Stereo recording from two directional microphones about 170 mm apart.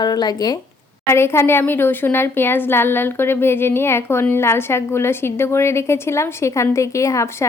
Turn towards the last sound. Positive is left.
turn(degrees=20)  # may be behind; listen again after turning